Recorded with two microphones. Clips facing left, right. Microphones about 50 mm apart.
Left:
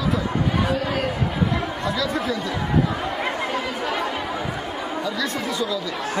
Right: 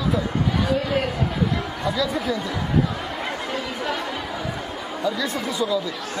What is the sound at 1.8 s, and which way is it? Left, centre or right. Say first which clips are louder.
Speech: right 3 dB; centre.